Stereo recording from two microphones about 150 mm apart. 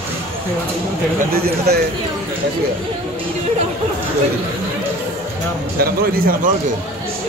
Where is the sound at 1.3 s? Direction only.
85° right.